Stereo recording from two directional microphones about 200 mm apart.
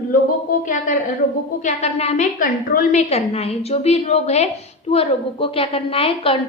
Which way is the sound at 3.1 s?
30° left (ahead or behind).